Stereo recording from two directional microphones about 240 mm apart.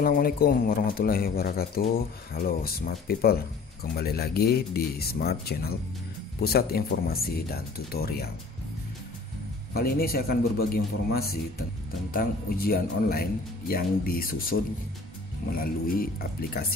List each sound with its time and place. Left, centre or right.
0.0 s speech: left
9.8 s speech: left